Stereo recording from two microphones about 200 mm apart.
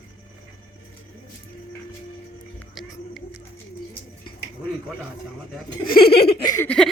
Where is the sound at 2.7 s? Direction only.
Centre (ahead or behind).